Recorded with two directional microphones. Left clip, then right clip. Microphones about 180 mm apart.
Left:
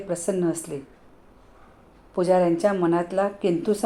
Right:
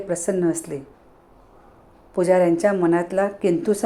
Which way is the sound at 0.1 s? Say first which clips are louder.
Right 3 dB; 20° right (ahead or behind).